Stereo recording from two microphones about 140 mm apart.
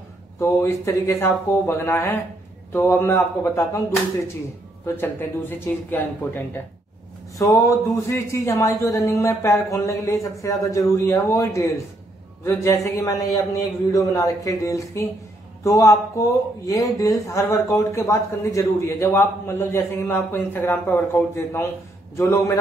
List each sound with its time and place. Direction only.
0.4 s speech: 20° left (ahead or behind)
4.8 s speech: 15° left (ahead or behind)